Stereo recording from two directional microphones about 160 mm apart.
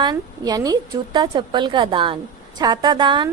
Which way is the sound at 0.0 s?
25° right (ahead or behind).